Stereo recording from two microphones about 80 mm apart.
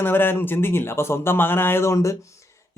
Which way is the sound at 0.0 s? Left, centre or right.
Left.